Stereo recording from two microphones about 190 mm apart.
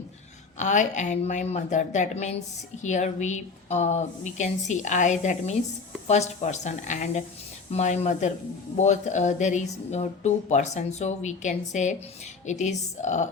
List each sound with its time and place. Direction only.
0.6 s a woman's voice: 40° left (ahead or behind)